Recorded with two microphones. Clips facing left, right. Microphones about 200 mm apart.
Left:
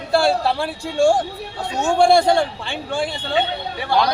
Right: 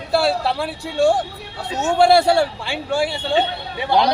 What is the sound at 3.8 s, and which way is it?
Speech, 20° right (ahead or behind).